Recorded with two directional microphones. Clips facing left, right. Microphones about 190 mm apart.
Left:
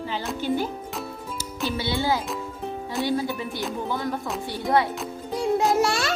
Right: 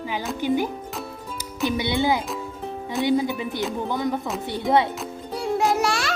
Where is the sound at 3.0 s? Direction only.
20° right (ahead or behind).